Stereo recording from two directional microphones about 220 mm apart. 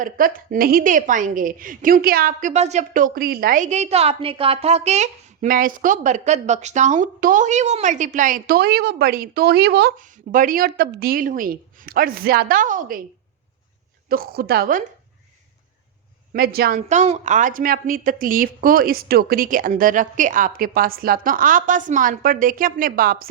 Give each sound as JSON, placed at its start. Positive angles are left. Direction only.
{"t": 0.0, "sound": "a woman's voice", "side_deg": -40}
{"t": 14.1, "sound": "a woman's voice", "side_deg": -45}
{"t": 16.3, "sound": "a woman's voice", "side_deg": -45}